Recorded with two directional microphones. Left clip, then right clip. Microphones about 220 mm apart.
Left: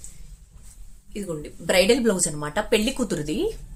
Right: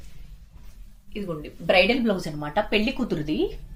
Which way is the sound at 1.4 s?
20° left (ahead or behind).